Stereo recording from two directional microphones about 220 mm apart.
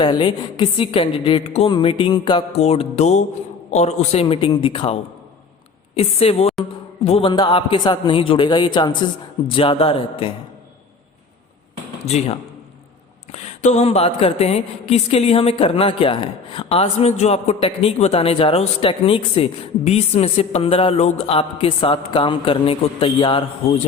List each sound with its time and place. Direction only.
0.0 s speech: 20° left (ahead or behind)
6.0 s speech: 25° left (ahead or behind)
12.0 s speech: 30° left (ahead or behind)